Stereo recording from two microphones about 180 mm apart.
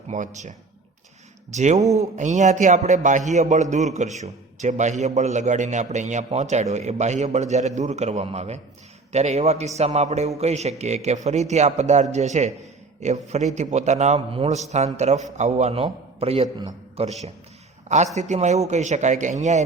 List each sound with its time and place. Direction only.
0.1 s a man's voice: 40° right (ahead or behind)
1.5 s a man's voice: 40° right (ahead or behind)